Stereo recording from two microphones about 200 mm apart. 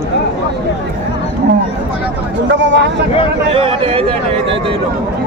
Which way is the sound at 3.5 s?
30° right (ahead or behind).